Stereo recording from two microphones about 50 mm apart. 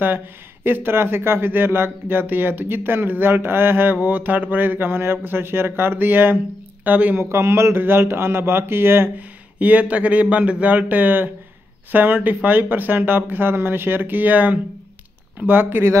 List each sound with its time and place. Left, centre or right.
0.7 s speech: right
7.2 s a man's voice: right
7.8 s speech: right
9.6 s speech: right